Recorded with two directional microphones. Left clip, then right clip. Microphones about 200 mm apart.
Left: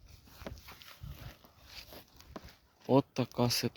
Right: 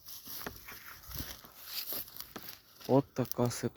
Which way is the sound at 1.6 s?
55° right (ahead or behind).